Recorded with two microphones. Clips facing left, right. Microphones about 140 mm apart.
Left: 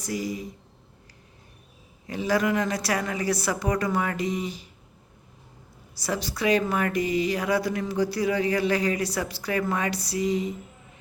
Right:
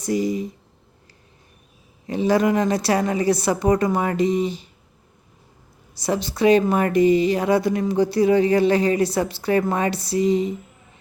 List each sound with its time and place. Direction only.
0.0 s speech: 25° right (ahead or behind)
2.0 s speech: 25° right (ahead or behind)
5.9 s speech: 25° right (ahead or behind)